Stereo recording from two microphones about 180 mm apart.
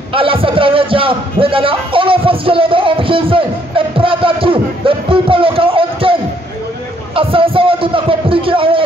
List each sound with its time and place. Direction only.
0.1 s a man's voice: 30° right (ahead or behind)
7.2 s a man's voice: 30° right (ahead or behind)